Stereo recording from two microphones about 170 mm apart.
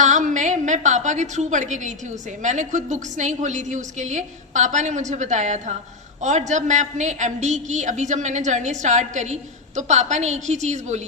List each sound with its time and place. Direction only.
0.0 s a woman's voice: 45° right (ahead or behind)